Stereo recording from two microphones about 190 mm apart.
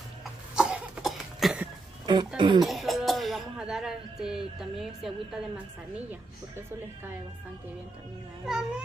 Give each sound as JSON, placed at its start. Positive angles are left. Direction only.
{"t": 0.6, "sound": "cough", "side_deg": -5}
{"t": 2.0, "sound": "speech", "side_deg": -25}
{"t": 2.6, "sound": "a sound", "side_deg": 0}
{"t": 8.5, "sound": "speech", "side_deg": -5}